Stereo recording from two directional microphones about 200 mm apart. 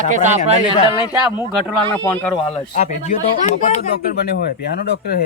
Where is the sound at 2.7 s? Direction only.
40° left (ahead or behind).